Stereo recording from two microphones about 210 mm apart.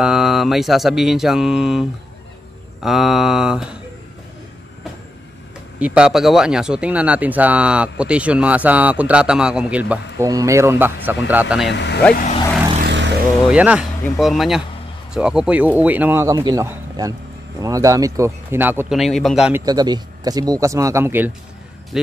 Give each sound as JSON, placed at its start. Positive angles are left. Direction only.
{"t": 0.0, "sound": "speech", "side_deg": 0}
{"t": 5.8, "sound": "speech", "side_deg": -5}
{"t": 11.7, "sound": "speech", "side_deg": 55}
{"t": 12.1, "sound": "speech", "side_deg": 40}
{"t": 12.8, "sound": "vehicle", "side_deg": -60}
{"t": 13.5, "sound": "speech", "side_deg": -5}
{"t": 19.6, "sound": "speech", "side_deg": -20}